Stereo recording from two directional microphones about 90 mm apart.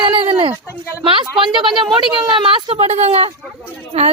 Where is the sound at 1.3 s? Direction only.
70° right (ahead or behind); by 3.3 s 90° right.